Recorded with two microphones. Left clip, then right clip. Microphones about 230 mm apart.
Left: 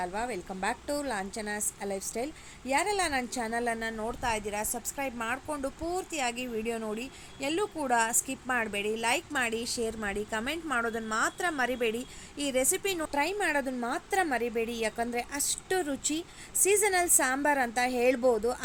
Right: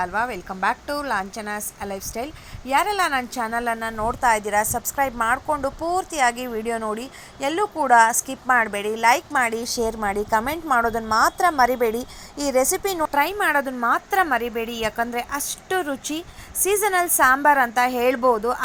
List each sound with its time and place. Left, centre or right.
0.0 s a woman's voice: centre
6.3 s speech: right
6.7 s a woman's voice: centre
7.9 s a woman's voice: centre
9.6 s a woman's voice: centre
9.8 s a woman's voice: centre
10.2 s a woman's voice: centre
11.4 s a woman's voice: centre
13.1 s a woman's voice: centre